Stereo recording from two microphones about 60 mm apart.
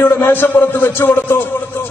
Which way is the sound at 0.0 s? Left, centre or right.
Left.